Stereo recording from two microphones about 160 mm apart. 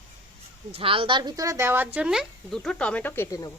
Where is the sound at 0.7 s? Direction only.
35° right (ahead or behind); by 3.5 s 20° left (ahead or behind).